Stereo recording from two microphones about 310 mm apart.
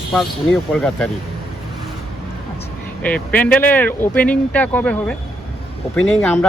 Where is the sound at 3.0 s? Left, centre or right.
Centre.